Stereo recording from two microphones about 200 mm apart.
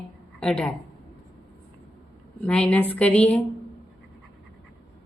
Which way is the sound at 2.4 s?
5° left (ahead or behind).